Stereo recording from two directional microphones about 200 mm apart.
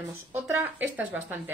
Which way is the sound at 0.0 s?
10° right (ahead or behind).